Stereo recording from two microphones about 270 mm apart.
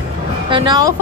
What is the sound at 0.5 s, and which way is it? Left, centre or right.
Speech, centre.